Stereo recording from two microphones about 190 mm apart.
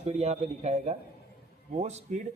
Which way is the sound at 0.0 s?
35° right (ahead or behind).